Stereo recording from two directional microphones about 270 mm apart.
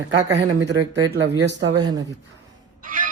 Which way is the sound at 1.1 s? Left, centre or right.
Right.